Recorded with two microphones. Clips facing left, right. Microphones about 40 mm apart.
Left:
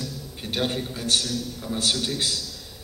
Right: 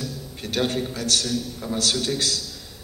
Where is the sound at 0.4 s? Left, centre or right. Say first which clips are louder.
Right 3 dB; left.